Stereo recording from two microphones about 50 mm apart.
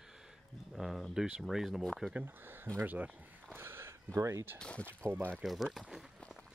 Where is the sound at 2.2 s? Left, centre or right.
Right.